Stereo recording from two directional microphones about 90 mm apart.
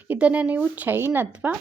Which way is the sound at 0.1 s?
15° right (ahead or behind).